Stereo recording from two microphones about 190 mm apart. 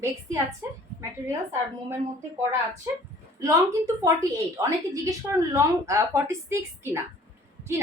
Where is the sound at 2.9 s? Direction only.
20° right (ahead or behind).